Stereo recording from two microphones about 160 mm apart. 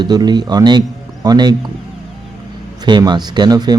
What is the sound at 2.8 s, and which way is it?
Speech, 25° right (ahead or behind).